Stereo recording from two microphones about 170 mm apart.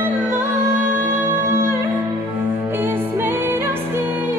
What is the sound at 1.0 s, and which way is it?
Music, 15° right (ahead or behind).